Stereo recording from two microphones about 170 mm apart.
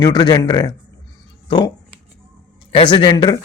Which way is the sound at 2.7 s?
30° left (ahead or behind).